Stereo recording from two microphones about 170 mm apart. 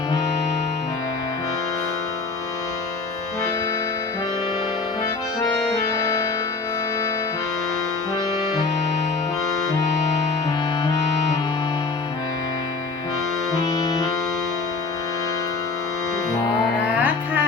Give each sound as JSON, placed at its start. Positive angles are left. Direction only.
{"t": 6.0, "sound": "music", "side_deg": 20}
{"t": 13.6, "sound": "accordion", "side_deg": 20}
{"t": 16.9, "sound": "music", "side_deg": -10}